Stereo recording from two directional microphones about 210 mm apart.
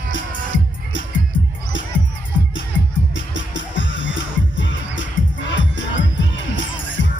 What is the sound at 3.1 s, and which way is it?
Music, 60° left (ahead or behind).